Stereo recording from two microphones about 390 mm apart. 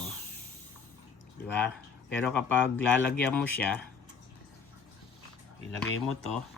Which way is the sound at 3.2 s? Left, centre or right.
Centre.